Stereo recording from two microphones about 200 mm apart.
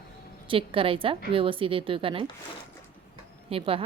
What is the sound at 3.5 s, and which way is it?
Speech, 30° right (ahead or behind).